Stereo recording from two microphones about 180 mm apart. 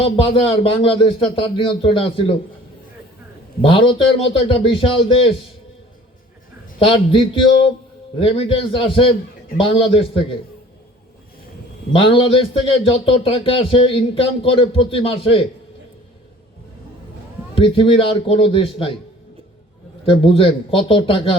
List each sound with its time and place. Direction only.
0.0 s a man's voice: 30° left (ahead or behind)
3.6 s a man's voice: 30° left (ahead or behind)
6.7 s a man's voice: 30° left (ahead or behind)
11.9 s a man's voice: 30° left (ahead or behind)
17.5 s a man's voice: 30° left (ahead or behind)
20.1 s a man's voice: 30° left (ahead or behind)